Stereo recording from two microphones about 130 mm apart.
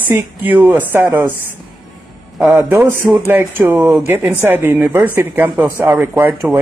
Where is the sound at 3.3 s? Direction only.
15° right (ahead or behind).